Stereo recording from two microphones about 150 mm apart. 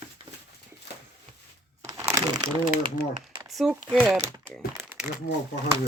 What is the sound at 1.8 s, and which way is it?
Crumpling, 20° right (ahead or behind).